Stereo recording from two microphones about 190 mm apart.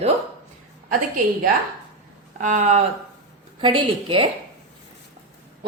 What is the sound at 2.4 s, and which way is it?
Speech, 40° right (ahead or behind).